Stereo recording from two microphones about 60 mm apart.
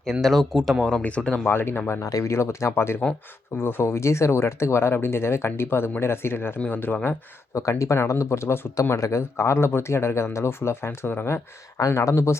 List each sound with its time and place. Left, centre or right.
0.0 s speech: centre
1.0 s speech: centre
1.5 s speech: left
2.0 s speech: left
2.3 s speech: left
7.5 s speech: left
11.9 s speech: left